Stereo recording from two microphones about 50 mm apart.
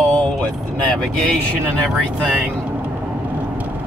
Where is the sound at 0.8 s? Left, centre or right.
Left.